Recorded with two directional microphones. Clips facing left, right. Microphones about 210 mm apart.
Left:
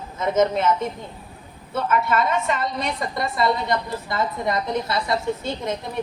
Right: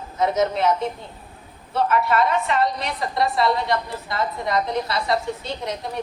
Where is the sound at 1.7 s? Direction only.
45° left (ahead or behind).